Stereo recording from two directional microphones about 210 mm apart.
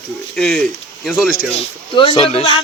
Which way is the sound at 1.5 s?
25° left (ahead or behind).